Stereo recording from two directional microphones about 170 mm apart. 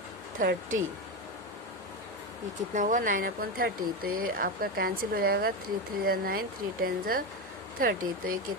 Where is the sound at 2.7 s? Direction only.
50° right (ahead or behind).